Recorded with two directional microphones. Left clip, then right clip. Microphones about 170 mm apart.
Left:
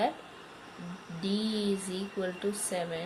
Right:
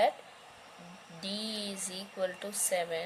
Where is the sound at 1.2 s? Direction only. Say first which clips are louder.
Left 4 dB; 60° right (ahead or behind).